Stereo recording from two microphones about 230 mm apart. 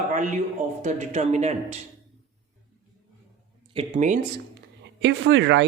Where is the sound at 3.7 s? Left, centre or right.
Right.